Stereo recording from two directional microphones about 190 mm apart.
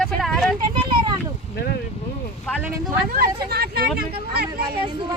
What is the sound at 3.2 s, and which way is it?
Speech, 55° right (ahead or behind).